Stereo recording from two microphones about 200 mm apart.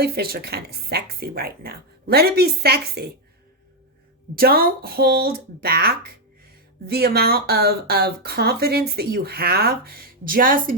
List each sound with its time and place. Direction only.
0.0 s speech: 50° right (ahead or behind)
4.4 s speech: 50° right (ahead or behind)